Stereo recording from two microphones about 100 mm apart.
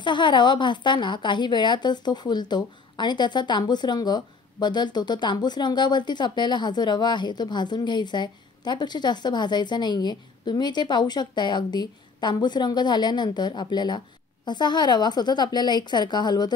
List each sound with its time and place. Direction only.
0.0 s a woman's voice: 50° left (ahead or behind)